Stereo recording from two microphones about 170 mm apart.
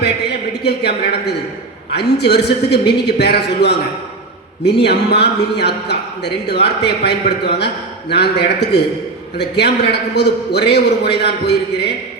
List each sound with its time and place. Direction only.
0.0 s a man's voice: 80° left